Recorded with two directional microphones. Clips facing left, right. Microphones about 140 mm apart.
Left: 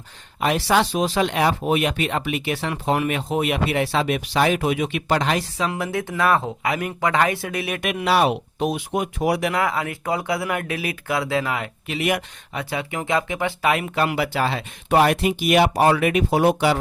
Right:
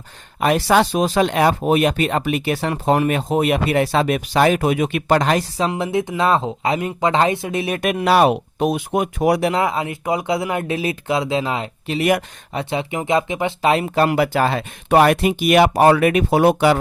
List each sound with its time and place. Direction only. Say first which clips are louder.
0.3 s speech: right 4 dB; 50° right (ahead or behind)
5.6 s speech: right 5 dB; 25° right (ahead or behind)
7.8 s speech: right 4 dB; 40° right (ahead or behind)
9.4 s speech: right 3 dB; 25° right (ahead or behind)
11.9 s speech: right 5 dB; 45° right (ahead or behind)
12.5 s speech: right 4 dB; 25° right (ahead or behind); by 16.7 s 60° right (ahead or behind)